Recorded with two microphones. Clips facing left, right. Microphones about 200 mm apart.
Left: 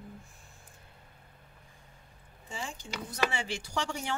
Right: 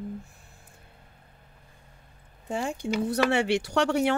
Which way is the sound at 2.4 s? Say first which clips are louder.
Right 12 dB; 60° right (ahead or behind).